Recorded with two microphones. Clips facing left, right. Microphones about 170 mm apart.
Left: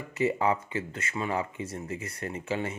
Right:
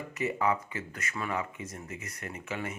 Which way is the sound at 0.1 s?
30° left (ahead or behind).